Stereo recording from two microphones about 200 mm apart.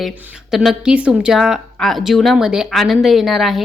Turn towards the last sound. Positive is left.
turn(degrees=0)  # may be behind; listen again after turning